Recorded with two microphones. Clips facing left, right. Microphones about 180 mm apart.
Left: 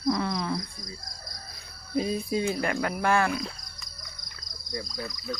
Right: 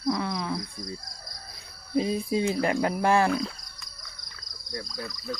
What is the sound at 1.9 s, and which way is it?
Speech, 25° right (ahead or behind).